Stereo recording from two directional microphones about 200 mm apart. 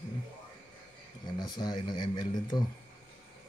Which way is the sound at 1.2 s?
20° left (ahead or behind).